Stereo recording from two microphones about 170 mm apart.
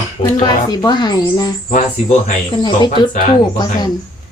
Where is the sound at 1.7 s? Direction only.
50° left (ahead or behind).